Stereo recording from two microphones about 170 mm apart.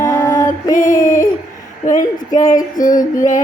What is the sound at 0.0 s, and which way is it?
Female singing, 15° left (ahead or behind).